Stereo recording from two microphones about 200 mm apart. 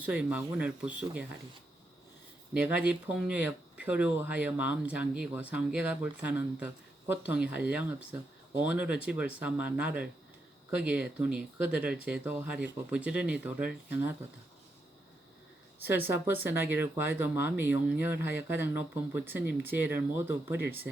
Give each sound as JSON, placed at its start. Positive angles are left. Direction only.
{"t": 0.0, "sound": "speech", "side_deg": -5}
{"t": 2.5, "sound": "speech", "side_deg": -10}
{"t": 15.9, "sound": "speech", "side_deg": -10}